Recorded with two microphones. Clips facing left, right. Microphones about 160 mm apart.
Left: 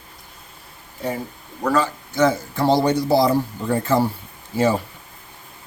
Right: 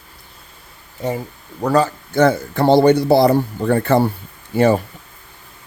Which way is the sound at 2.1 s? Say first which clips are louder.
Right 4 dB; 60° right (ahead or behind).